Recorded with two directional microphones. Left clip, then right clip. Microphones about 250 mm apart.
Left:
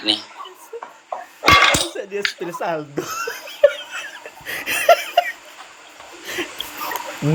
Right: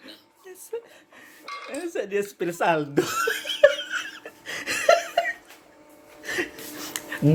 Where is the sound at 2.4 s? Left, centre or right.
Centre.